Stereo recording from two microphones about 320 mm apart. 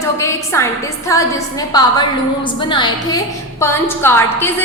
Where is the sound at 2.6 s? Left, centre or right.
Centre.